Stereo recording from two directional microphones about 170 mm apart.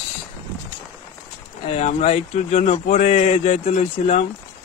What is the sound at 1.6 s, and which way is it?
Speech, 35° left (ahead or behind).